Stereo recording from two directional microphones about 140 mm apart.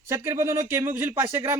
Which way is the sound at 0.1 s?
20° right (ahead or behind).